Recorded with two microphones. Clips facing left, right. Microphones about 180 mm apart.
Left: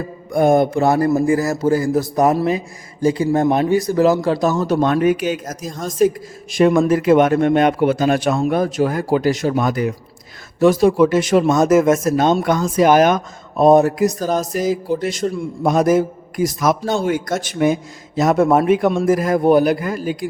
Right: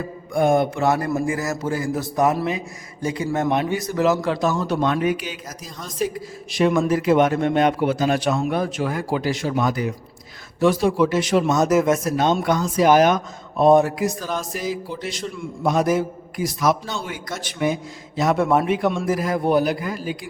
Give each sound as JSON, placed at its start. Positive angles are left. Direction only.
{"t": 0.3, "sound": "a man's voice", "side_deg": 40}